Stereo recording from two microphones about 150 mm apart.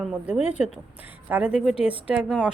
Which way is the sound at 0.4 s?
50° left (ahead or behind).